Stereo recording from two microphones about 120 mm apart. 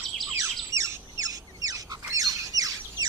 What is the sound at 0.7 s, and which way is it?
Bird, 25° right (ahead or behind).